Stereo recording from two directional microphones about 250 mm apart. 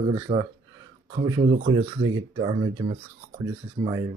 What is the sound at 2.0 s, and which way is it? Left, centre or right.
Speech, right.